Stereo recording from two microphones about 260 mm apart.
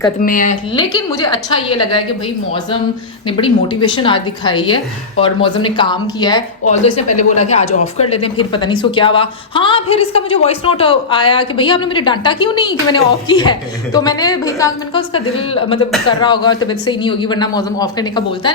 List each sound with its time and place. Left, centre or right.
0.2 s speech: left
0.8 s a man's voice: centre
3.2 s speech: centre
6.7 s a man's voice: left